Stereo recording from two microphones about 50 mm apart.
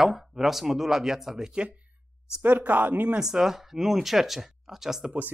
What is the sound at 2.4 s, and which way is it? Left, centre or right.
Speech, right.